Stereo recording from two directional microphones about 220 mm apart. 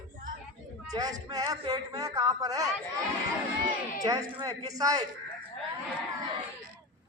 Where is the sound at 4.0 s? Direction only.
15° right (ahead or behind).